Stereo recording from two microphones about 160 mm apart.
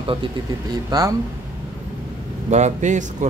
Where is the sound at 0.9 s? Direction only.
20° right (ahead or behind).